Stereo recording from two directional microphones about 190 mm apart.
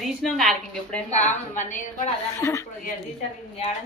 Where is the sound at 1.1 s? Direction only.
40° left (ahead or behind).